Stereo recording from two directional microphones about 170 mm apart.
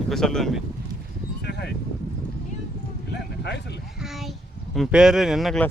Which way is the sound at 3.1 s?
80° left.